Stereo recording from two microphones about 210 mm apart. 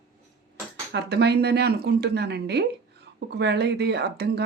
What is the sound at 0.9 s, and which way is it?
Speech, 55° right (ahead or behind).